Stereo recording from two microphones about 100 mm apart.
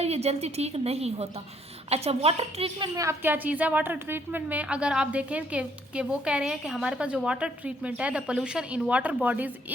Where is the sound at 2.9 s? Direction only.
35° right (ahead or behind).